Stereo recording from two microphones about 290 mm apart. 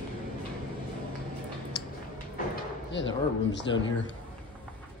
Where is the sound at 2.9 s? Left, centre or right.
Left.